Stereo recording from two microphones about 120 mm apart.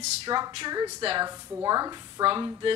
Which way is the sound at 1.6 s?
30° right (ahead or behind).